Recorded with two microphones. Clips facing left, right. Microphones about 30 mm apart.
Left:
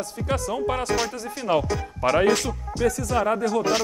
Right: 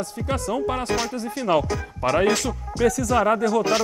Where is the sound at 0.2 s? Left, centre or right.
Centre.